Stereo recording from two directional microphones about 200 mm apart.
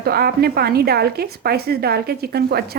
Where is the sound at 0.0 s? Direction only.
50° right (ahead or behind).